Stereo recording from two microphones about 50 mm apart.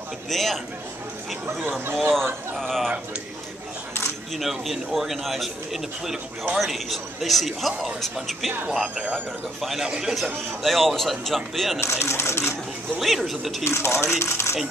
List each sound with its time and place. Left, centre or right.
0.3 s a man's voice: centre
2.0 s a man's voice: centre
4.4 s a man's voice: centre
8.5 s speech: centre
9.6 s a man's voice: centre
9.8 s speech: centre
10.6 s a man's voice: centre
11.8 s speech: left
13.0 s a man's voice: centre
13.7 s speech: left